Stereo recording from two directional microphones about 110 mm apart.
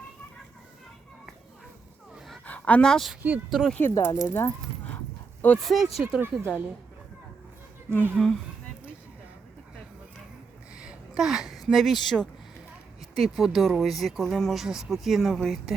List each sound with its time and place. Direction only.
2.1 s a sound: centre (ahead or behind)
2.4 s a sound: 15° left (ahead or behind)
3.2 s speech: 5° right (ahead or behind)
3.8 s speech: 20° left (ahead or behind)
4.2 s keys jangling: 20° left (ahead or behind)
5.6 s speech: centre (ahead or behind)
6.0 s speech: 15° right (ahead or behind)
8.1 s speech: 5° left (ahead or behind)
10.8 s a sound: 10° right (ahead or behind)
12.0 s speech: 5° left (ahead or behind)